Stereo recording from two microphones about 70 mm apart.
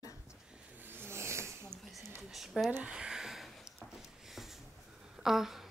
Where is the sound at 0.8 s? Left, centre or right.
Right.